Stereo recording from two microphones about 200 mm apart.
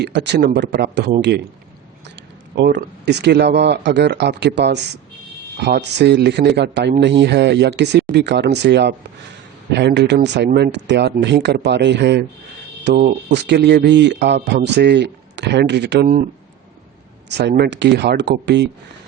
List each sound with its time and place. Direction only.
0.0 s speech: 60° right (ahead or behind)
2.6 s speech: 55° right (ahead or behind)
12.9 s speech: 40° right (ahead or behind)
13.2 s speech: 60° right (ahead or behind)
17.2 s speech: 55° right (ahead or behind)